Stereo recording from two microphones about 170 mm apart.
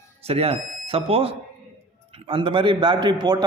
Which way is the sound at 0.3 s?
35° right (ahead or behind).